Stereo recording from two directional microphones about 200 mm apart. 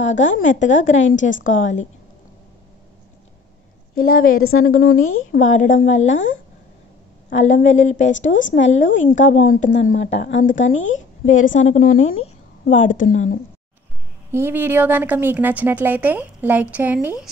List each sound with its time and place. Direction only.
0.4 s a woman's voice: 35° left (ahead or behind)
4.0 s a woman's voice: 45° left (ahead or behind)
4.4 s a woman's voice: 90° left
4.6 s a woman's voice: 45° left (ahead or behind)
6.1 s speech: 70° left (ahead or behind)
7.2 s a woman's voice: 40° left (ahead or behind)
8.3 s speech: 70° left (ahead or behind)
8.5 s a woman's voice: 35° left (ahead or behind)
8.8 s speech: 70° left (ahead or behind)
9.5 s a woman's voice: 40° left (ahead or behind)
10.7 s speech: 75° left (ahead or behind)
11.3 s a woman's voice: 40° left (ahead or behind)
14.3 s a woman's voice: 10° right (ahead or behind)